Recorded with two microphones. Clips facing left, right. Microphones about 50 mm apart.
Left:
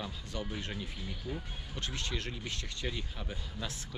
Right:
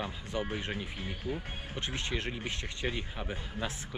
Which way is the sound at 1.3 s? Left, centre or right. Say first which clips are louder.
Right 4 dB; right.